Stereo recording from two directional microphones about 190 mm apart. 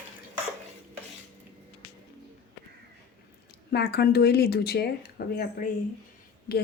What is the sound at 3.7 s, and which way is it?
Speech, 55° left (ahead or behind).